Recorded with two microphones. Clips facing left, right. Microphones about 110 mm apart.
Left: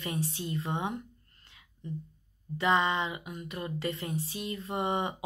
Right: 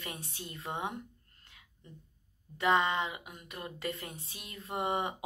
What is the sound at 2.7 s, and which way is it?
Speech, 45° right (ahead or behind).